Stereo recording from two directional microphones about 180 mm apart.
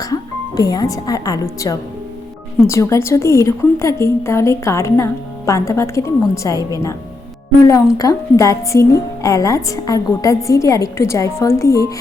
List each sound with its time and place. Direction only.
0.0 s a woman's voice: 20° left (ahead or behind)
7.9 s a woman's voice: 15° left (ahead or behind)